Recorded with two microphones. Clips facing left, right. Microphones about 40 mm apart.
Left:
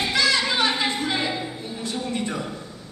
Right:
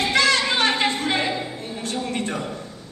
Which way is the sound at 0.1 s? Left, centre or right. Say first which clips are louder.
Right 2 dB; right.